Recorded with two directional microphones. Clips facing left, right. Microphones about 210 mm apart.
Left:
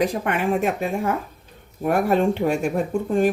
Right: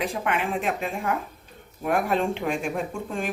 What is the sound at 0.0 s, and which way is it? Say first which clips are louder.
Speech: left 5 dB; 40° left (ahead or behind).